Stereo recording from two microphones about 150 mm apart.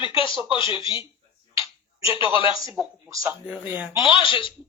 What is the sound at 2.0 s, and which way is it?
Speech, 35° left (ahead or behind).